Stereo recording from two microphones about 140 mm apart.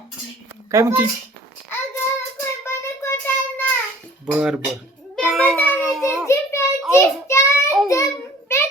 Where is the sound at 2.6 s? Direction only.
20° left (ahead or behind).